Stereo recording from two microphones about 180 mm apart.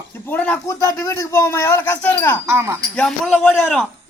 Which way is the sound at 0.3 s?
10° left (ahead or behind).